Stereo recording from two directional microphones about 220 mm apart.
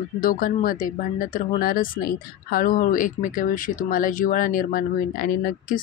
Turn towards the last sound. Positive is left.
turn(degrees=40)  # may be behind; listen again after turning